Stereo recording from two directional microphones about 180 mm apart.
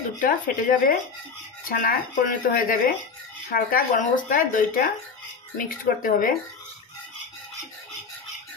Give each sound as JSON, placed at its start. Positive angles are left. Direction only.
{"t": 0.2, "sound": "speech", "side_deg": 50}